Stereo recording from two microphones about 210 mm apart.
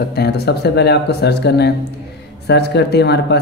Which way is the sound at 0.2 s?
50° left (ahead or behind).